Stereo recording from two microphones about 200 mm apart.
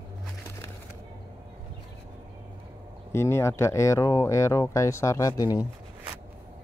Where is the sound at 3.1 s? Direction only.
15° left (ahead or behind).